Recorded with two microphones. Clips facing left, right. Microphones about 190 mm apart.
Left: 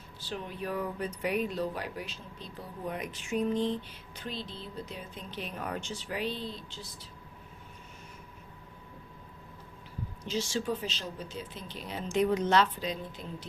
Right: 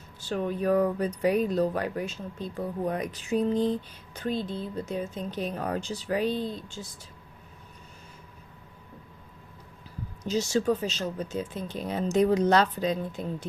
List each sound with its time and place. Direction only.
0.2 s speech: 45° right (ahead or behind)
10.3 s speech: 40° right (ahead or behind)